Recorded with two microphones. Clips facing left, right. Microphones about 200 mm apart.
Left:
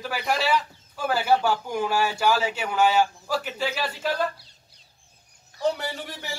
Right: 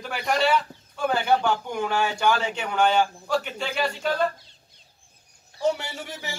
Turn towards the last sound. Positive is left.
turn(degrees=0)  # may be behind; listen again after turning